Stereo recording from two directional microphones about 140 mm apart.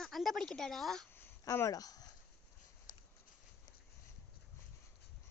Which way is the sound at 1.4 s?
25° left (ahead or behind).